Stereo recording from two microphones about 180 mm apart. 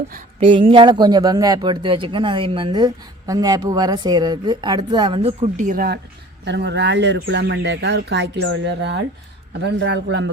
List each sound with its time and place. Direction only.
0.3 s speech: 30° right (ahead or behind); by 6.0 s 55° right (ahead or behind)
6.4 s speech: 75° right (ahead or behind)